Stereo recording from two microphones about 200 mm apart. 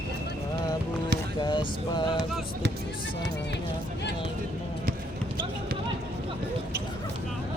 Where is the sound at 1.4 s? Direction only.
20° left (ahead or behind).